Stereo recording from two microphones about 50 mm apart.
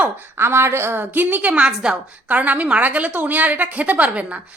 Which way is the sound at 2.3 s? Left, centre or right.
Right.